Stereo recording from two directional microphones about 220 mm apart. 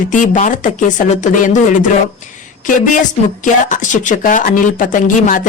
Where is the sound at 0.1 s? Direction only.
35° left (ahead or behind).